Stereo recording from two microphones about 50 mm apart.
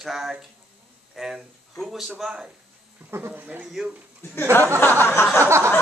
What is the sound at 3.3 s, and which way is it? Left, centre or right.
Speech, right.